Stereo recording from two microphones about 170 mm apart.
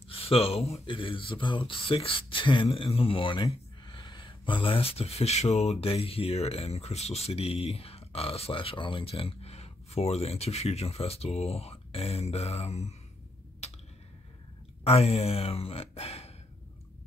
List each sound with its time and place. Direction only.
0.1 s speech: 35° left (ahead or behind)
13.6 s a sound: 40° left (ahead or behind)
14.8 s speech: 35° left (ahead or behind)